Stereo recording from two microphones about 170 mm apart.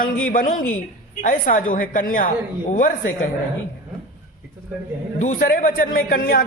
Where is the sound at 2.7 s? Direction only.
55° left (ahead or behind).